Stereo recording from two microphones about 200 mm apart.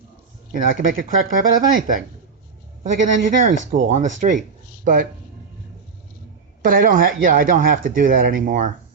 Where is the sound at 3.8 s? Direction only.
40° right (ahead or behind).